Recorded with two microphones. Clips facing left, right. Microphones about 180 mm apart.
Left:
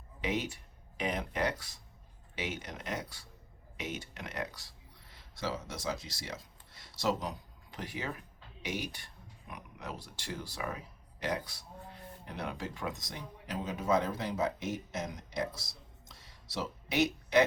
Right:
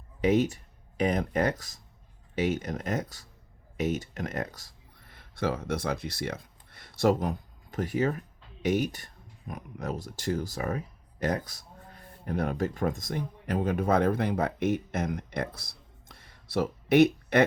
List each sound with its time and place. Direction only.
0.2 s speech: 45° right (ahead or behind)